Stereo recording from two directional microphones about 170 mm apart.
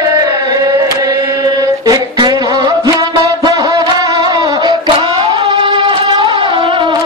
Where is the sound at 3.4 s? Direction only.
25° right (ahead or behind).